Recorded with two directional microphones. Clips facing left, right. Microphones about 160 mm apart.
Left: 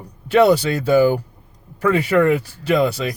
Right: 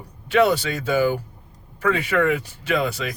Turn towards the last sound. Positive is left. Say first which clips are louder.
# left 6 dB
turn(degrees=40)  # may be behind; listen again after turning